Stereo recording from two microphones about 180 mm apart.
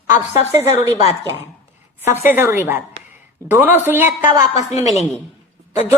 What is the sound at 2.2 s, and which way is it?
A woman's voice, 10° right (ahead or behind).